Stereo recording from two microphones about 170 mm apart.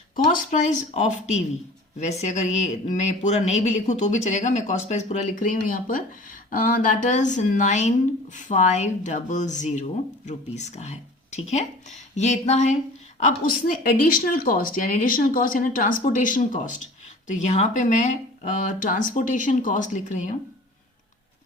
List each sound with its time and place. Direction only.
0.5 s speech: 45° left (ahead or behind)